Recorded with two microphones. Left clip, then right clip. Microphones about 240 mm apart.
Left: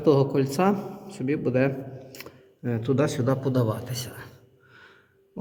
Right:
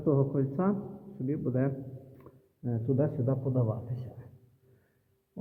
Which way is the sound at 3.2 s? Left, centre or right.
Left.